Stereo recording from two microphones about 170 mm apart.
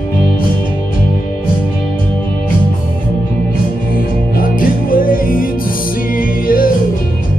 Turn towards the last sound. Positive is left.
turn(degrees=55)  # may be behind; listen again after turning